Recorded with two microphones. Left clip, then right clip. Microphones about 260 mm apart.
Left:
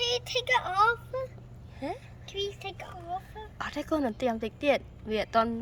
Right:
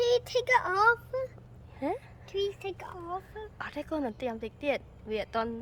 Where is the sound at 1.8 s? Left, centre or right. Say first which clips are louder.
Right 3 dB; centre.